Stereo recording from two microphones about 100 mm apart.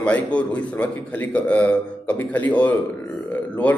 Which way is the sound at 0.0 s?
15° left (ahead or behind).